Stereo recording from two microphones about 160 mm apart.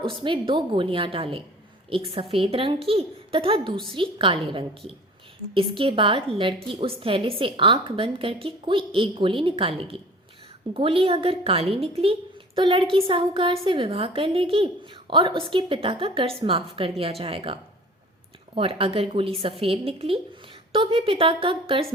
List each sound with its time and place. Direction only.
0.0 s a woman's voice: 30° right (ahead or behind)